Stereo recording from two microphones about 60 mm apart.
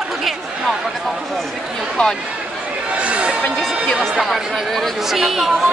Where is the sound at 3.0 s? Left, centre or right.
Centre.